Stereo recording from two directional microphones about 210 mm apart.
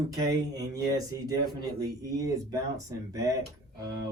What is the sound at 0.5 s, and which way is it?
Speech, 15° right (ahead or behind).